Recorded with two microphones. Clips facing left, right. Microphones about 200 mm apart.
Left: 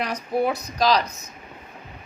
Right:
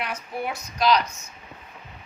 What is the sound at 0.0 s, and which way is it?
A woman's voice, 35° left (ahead or behind).